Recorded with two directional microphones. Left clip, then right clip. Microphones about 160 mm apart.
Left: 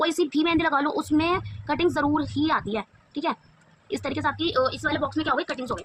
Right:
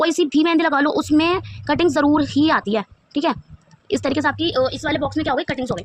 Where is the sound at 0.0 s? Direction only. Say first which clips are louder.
Right 6 dB; 35° right (ahead or behind).